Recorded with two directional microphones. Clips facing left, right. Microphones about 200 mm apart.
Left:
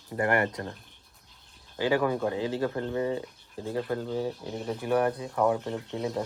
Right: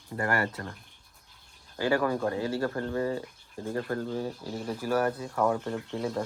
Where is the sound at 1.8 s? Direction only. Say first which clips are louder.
Left 1 dB; 10° left (ahead or behind).